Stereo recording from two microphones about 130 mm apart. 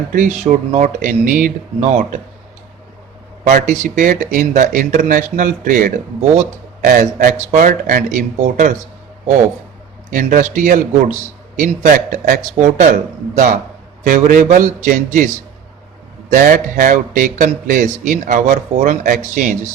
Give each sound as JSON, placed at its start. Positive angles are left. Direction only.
{"t": 0.1, "sound": "a man's voice", "side_deg": -80}
{"t": 3.4, "sound": "speech", "side_deg": -80}
{"t": 10.1, "sound": "a man's voice", "side_deg": -90}
{"t": 11.6, "sound": "speech", "side_deg": -90}
{"t": 12.5, "sound": "speech", "side_deg": -70}
{"t": 14.1, "sound": "speech", "side_deg": -90}
{"t": 16.3, "sound": "a man's voice", "side_deg": -90}